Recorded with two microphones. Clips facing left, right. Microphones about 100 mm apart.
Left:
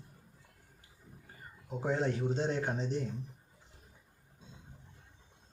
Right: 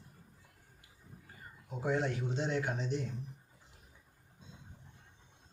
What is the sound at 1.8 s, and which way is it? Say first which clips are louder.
Speech: left 1 dB; 30° left (ahead or behind).